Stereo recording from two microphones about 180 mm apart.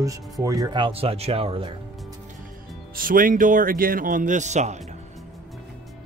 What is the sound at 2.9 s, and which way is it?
Speech, 50° right (ahead or behind).